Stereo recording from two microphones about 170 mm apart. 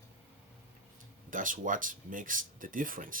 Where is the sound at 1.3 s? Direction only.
50° right (ahead or behind).